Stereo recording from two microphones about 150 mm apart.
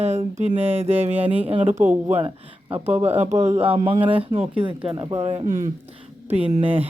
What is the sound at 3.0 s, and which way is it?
Speech, 45° right (ahead or behind).